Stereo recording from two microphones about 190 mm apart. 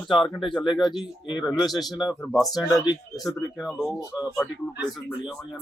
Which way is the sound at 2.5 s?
20° left (ahead or behind).